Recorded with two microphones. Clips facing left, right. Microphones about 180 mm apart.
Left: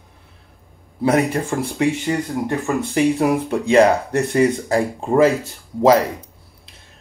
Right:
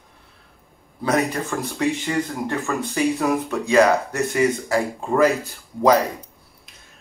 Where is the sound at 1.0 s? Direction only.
25° left (ahead or behind).